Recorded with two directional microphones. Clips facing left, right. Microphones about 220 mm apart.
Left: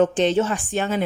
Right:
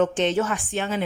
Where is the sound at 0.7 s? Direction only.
40° left (ahead or behind).